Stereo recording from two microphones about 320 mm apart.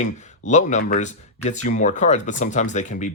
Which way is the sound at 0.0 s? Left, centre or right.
Left.